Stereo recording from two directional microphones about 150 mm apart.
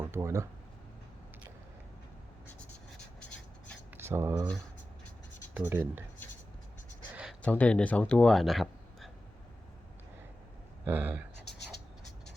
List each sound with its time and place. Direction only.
0.0 s speech: 15° right (ahead or behind)
3.2 s rub: 10° left (ahead or behind)
3.9 s speech: 15° right (ahead or behind)
5.5 s speech: 10° right (ahead or behind)
7.4 s speech: 10° left (ahead or behind)
10.8 s speech: 15° right (ahead or behind)